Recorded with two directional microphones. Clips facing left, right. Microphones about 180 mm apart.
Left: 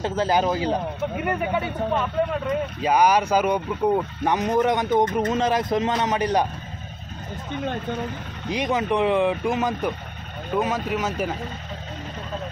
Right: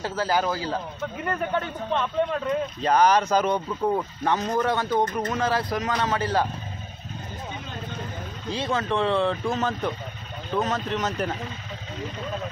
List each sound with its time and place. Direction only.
0.0 s speech: 20° left (ahead or behind)
8.5 s speech: 15° left (ahead or behind)